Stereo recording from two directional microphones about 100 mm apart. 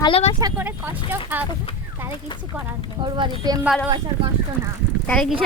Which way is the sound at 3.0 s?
50° right (ahead or behind).